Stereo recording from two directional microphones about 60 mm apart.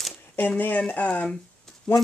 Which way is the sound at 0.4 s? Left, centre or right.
Left.